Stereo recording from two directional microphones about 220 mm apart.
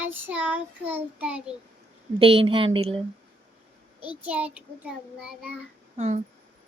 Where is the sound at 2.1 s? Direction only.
25° right (ahead or behind).